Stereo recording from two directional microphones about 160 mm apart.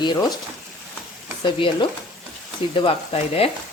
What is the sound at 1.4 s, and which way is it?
Speech, 30° left (ahead or behind).